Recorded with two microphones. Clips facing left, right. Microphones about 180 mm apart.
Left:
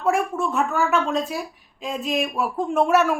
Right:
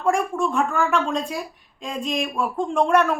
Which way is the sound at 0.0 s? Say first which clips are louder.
Even; 5° left (ahead or behind).